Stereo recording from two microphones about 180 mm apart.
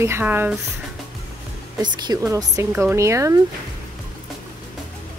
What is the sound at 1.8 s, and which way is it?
Speech, 25° right (ahead or behind).